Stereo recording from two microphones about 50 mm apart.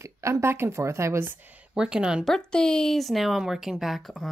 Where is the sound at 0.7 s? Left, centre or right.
Right.